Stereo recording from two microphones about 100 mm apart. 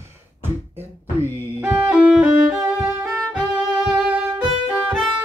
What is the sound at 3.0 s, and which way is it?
Violin, 10° right (ahead or behind).